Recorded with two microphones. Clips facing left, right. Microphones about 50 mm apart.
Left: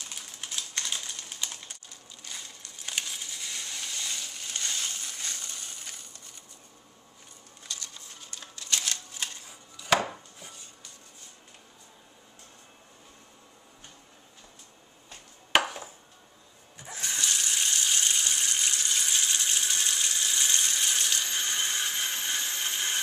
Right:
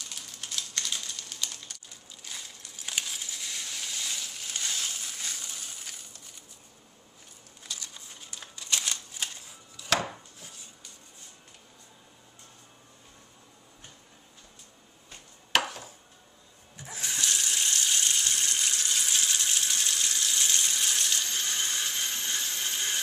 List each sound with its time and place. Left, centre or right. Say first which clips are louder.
0.1 s typing: even; centre
2.2 s crushing: even; centre
7.6 s a sound: even; centre
9.8 s chopping: left 3 dB; centre
15.6 s a sound: left 2 dB; centre
16.7 s water tap: left 1 dB; centre